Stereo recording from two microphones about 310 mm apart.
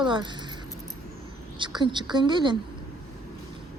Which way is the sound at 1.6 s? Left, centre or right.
Centre.